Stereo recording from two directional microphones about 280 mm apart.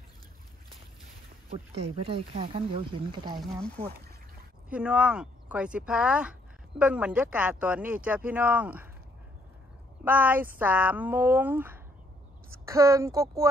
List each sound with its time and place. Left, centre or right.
1.8 s speech: centre
3.3 s speech: centre
10.0 s speech: centre